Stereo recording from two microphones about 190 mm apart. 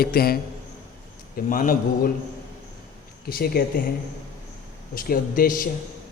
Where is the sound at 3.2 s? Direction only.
55° left (ahead or behind).